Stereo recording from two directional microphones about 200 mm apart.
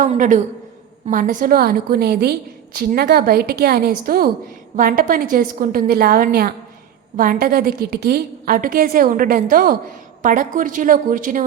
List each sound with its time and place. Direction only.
0.0 s a woman's voice: 40° right (ahead or behind)